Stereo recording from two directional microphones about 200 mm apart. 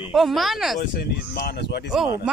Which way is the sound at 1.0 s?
55° left (ahead or behind).